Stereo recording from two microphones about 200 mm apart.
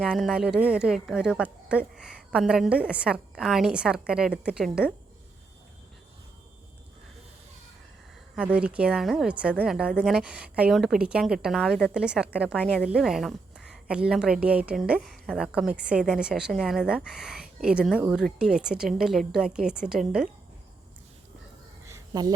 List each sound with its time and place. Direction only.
0.0 s a woman's voice: centre (ahead or behind)
8.4 s a woman's voice: 5° right (ahead or behind)
21.8 s a sound: 15° right (ahead or behind)